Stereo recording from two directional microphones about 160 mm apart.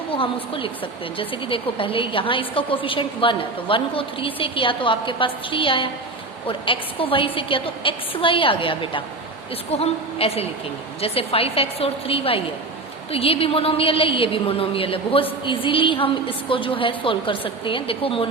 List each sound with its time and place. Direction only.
1.2 s a woman's voice: 35° left (ahead or behind)